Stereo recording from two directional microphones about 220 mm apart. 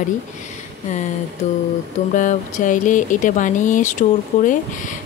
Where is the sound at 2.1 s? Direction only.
35° left (ahead or behind).